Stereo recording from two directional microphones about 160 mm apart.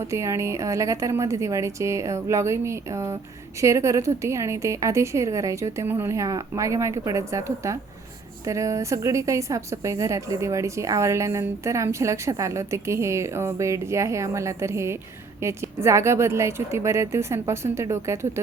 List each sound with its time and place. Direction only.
0.1 s a woman's voice: 20° right (ahead or behind)